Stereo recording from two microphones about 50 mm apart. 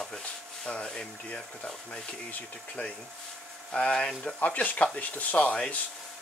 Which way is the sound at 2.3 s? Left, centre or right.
Left.